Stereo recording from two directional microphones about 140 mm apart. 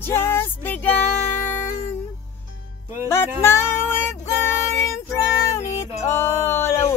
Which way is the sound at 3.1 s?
20° left (ahead or behind).